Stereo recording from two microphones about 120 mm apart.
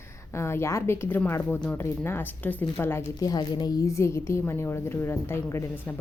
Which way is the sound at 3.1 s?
35° left (ahead or behind).